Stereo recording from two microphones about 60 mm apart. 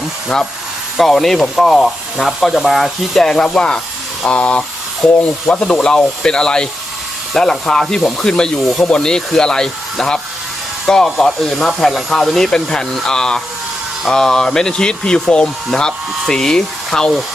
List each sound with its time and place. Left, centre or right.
0.9 s speech: centre